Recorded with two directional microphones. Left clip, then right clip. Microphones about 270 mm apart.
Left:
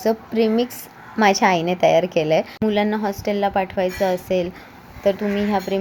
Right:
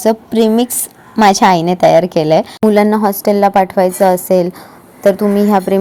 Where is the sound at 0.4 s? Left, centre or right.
Right.